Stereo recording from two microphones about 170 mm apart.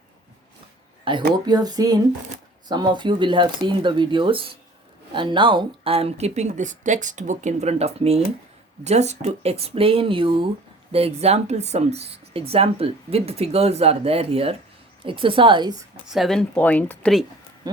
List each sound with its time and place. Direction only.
1.1 s speech: 30° right (ahead or behind)
16.0 s speech: centre (ahead or behind)